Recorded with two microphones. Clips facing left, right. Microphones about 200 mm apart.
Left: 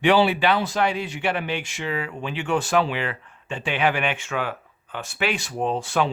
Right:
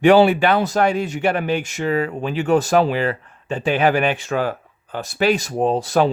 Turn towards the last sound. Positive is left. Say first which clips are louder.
# right 6 dB
turn(degrees=-40)  # may be behind; listen again after turning